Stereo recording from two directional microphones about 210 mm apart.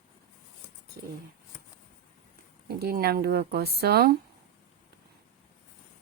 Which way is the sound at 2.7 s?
45° right (ahead or behind).